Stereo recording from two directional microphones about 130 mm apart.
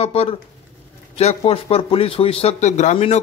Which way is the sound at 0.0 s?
50° left (ahead or behind).